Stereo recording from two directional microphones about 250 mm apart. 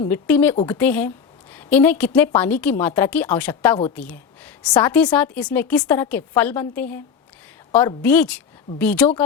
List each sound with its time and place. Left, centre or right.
0.0 s a woman's voice: centre